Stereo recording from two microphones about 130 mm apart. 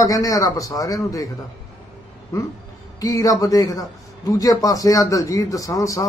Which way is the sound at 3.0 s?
25° left (ahead or behind).